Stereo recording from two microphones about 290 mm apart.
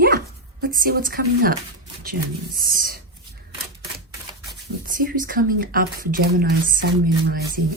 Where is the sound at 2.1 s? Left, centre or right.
Right.